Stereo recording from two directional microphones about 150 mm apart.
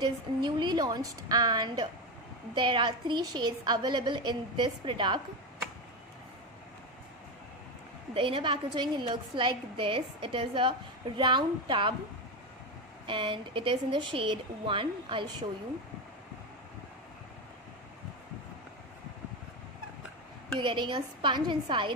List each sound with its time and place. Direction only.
0.0 s a woman's voice: 30° right (ahead or behind)
8.1 s a woman's voice: 35° right (ahead or behind)
13.0 s a woman's voice: 35° right (ahead or behind)
20.5 s a woman's voice: 30° right (ahead or behind)